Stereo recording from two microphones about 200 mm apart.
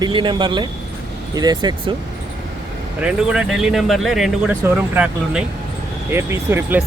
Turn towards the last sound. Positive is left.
turn(degrees=-10)  # may be behind; listen again after turning